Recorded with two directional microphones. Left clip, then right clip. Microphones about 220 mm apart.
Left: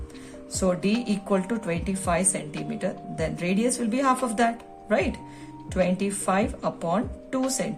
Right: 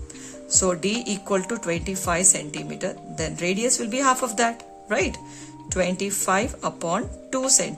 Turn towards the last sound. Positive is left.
turn(degrees=-30)  # may be behind; listen again after turning